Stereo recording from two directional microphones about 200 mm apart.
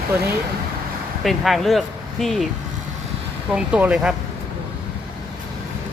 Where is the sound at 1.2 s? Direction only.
Centre (ahead or behind).